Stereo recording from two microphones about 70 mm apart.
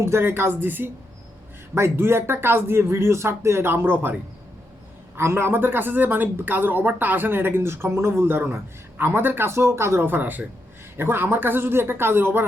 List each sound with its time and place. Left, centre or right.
0.0 s speech: right
5.1 s speech: right